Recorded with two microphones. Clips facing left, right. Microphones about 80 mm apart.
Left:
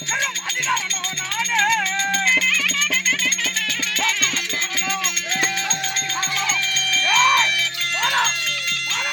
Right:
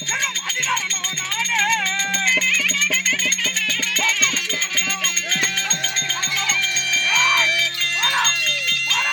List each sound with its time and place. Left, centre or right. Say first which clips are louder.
7.0 s music: left 3 dB; left
8.0 s wind chime: left 1 dB; centre